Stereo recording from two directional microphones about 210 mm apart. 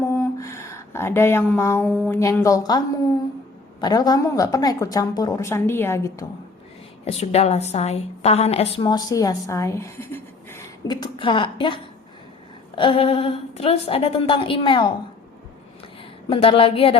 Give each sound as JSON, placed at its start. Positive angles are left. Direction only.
{"t": 0.0, "sound": "a sound", "side_deg": 15}
{"t": 2.0, "sound": "a woman's voice", "side_deg": 15}
{"t": 7.0, "sound": "a woman's voice", "side_deg": 30}
{"t": 16.3, "sound": "a woman's voice", "side_deg": 25}